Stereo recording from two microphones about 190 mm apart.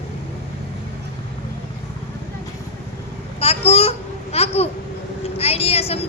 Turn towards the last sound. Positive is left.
turn(degrees=30)  # may be behind; listen again after turning